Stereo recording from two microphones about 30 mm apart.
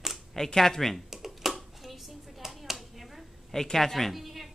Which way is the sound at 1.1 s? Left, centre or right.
Centre.